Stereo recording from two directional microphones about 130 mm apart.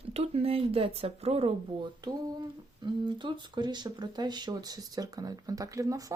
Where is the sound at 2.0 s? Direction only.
35° right (ahead or behind).